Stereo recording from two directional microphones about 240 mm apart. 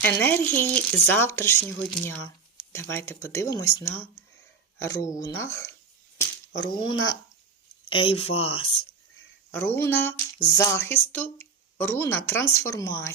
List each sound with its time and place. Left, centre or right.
0.0 s speech: centre
6.8 s speech: left
7.9 s speech: left
9.5 s speech: centre